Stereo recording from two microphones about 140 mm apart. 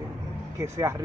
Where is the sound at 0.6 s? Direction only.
20° right (ahead or behind).